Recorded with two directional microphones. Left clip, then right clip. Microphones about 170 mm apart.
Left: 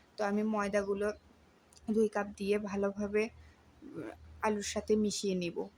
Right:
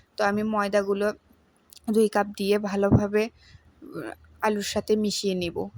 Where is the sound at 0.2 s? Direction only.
35° right (ahead or behind).